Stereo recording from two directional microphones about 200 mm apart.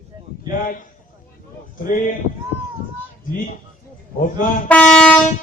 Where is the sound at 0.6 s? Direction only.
40° left (ahead or behind).